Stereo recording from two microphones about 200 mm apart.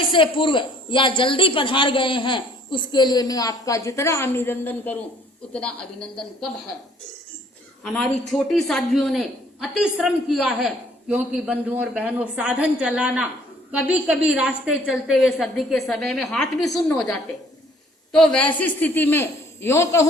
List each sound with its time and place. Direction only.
0.1 s a man's voice: 25° left (ahead or behind); by 6.1 s 5° left (ahead or behind)
7.9 s a man's voice: 5° left (ahead or behind)
18.1 s a woman's voice: centre (ahead or behind)